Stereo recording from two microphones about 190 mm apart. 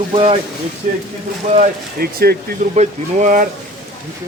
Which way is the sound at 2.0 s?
55° right (ahead or behind).